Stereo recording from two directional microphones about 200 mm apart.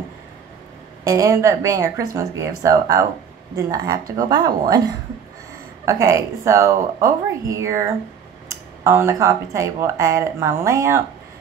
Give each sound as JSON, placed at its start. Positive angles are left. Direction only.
{"t": 1.0, "sound": "speech", "side_deg": -15}
{"t": 5.9, "sound": "speech", "side_deg": -15}